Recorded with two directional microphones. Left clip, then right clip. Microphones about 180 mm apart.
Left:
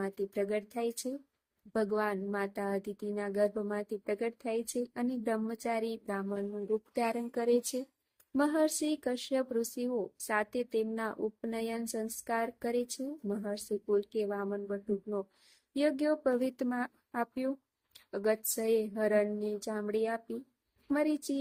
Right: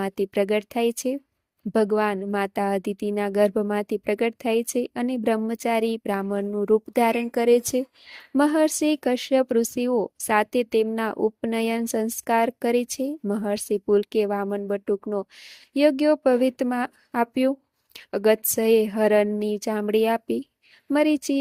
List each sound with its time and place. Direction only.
0.0 s speech: 45° right (ahead or behind)